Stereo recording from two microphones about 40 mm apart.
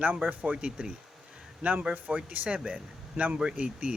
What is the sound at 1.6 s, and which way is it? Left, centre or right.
A man's voice, right.